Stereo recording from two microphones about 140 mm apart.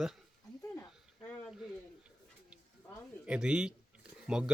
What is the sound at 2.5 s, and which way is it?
Bird, 5° right (ahead or behind).